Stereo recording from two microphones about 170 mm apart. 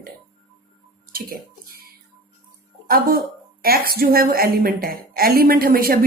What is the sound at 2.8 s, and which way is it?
A woman's voice, 60° right (ahead or behind).